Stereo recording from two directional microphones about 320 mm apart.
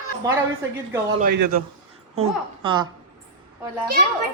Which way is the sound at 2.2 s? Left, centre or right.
Centre.